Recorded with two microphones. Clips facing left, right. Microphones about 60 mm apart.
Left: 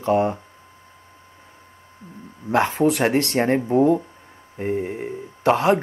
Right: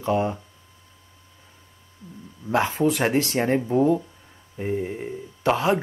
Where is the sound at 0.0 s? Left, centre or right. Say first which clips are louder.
Left 4 dB; left.